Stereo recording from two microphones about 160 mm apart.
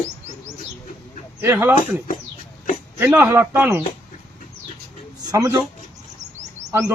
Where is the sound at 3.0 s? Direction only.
15° right (ahead or behind).